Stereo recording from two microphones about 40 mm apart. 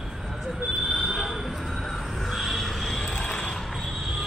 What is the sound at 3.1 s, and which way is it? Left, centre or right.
Creak, left.